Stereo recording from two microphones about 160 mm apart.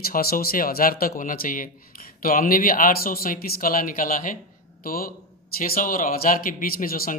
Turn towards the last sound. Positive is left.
turn(degrees=65)  # may be behind; listen again after turning